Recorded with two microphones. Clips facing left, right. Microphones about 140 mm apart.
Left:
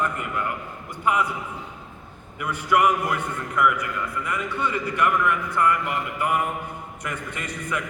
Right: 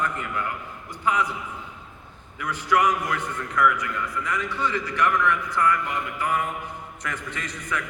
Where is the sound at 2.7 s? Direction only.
10° left (ahead or behind).